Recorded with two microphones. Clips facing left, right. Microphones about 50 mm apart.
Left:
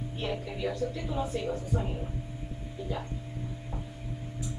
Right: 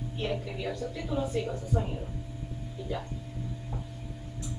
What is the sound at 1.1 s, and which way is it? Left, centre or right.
Speech, left.